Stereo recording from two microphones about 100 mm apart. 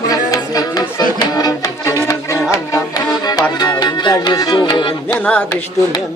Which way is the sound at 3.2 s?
45° left (ahead or behind).